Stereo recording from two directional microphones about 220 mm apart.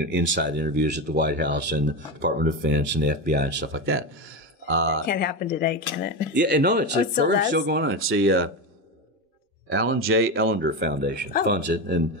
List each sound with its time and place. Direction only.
0.1 s speech: 55° right (ahead or behind)
5.0 s speech: 45° left (ahead or behind)
6.3 s speech: 50° right (ahead or behind)
9.7 s speech: 60° right (ahead or behind)